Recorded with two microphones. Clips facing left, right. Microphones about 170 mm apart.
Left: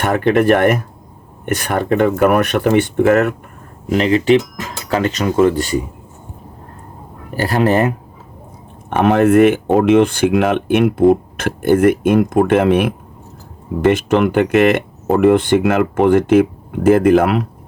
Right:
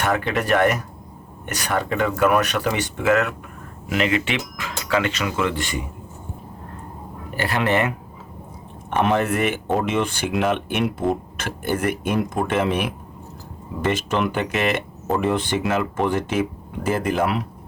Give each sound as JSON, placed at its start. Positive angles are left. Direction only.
{"t": 0.0, "sound": "speech", "side_deg": 50}
{"t": 3.8, "sound": "speech", "side_deg": 35}
{"t": 7.3, "sound": "speech", "side_deg": 40}
{"t": 9.0, "sound": "speech", "side_deg": 55}